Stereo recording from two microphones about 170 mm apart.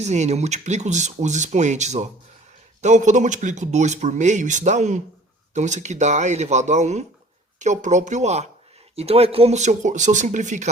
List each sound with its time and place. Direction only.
0.0 s speech: 40° right (ahead or behind)